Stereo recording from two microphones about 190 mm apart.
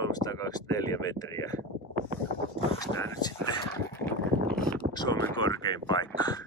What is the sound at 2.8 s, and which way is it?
Speech, 15° left (ahead or behind).